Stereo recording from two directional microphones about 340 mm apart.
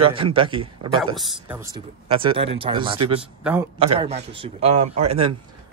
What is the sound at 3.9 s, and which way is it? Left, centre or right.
A man's voice, centre.